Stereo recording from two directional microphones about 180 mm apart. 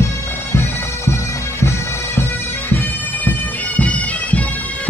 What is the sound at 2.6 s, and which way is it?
Bagpipes, 10° left (ahead or behind).